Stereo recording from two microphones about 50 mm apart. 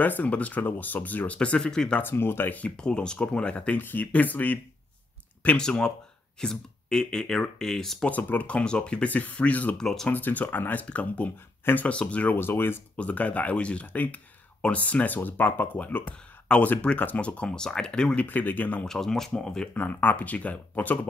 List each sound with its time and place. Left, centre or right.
0.0 s speech: left
1.7 s speech: centre
2.0 s speech: left
2.8 s speech: centre; by 4.6 s left
5.6 s speech: centre
8.1 s speech: left
9.1 s speech: left
9.8 s speech: centre
10.0 s speech: left
12.4 s speech: left
12.9 s speech: left
18.2 s speech: left
18.9 s speech: centre
19.7 s speech: left